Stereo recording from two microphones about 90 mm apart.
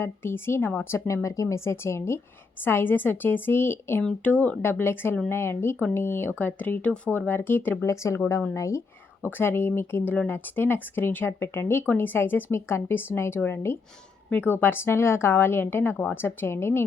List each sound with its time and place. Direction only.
0.0 s speech: 25° left (ahead or behind)
7.9 s speech: 35° left (ahead or behind)